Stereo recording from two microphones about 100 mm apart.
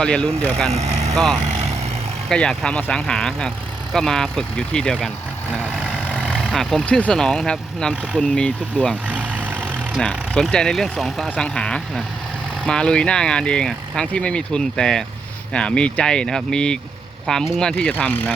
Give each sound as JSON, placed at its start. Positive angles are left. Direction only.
{"t": 0.0, "sound": "speech", "side_deg": 10}
{"t": 0.7, "sound": "speech", "side_deg": -90}
{"t": 1.1, "sound": "speech", "side_deg": 5}
{"t": 5.8, "sound": "vehicle", "side_deg": -10}
{"t": 6.6, "sound": "speech", "side_deg": 5}
{"t": 9.0, "sound": "vehicle", "side_deg": -15}
{"t": 10.0, "sound": "speech", "side_deg": 10}
{"t": 18.0, "sound": "speech", "side_deg": 20}